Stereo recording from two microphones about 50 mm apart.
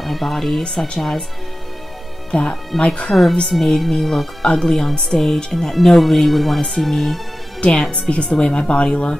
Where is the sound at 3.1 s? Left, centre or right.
Centre.